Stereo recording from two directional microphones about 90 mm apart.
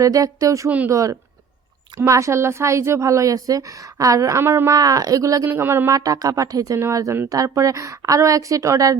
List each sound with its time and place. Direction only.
0.0 s a woman's voice: 40° right (ahead or behind)
4.7 s a woman's voice: 40° right (ahead or behind)
5.5 s speech: 25° right (ahead or behind)
5.9 s a woman's voice: 40° right (ahead or behind)